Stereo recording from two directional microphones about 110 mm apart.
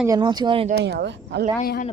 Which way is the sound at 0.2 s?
45° right (ahead or behind).